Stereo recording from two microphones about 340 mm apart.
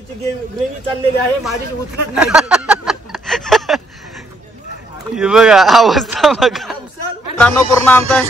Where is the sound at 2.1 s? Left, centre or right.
Centre.